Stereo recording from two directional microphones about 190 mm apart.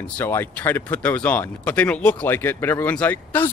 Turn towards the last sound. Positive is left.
turn(degrees=10)  # may be behind; listen again after turning